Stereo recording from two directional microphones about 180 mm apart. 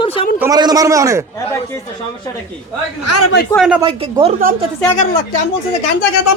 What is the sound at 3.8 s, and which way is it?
Speech, 30° right (ahead or behind).